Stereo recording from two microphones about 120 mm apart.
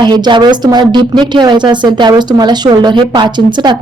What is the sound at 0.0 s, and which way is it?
A woman's voice, 40° right (ahead or behind).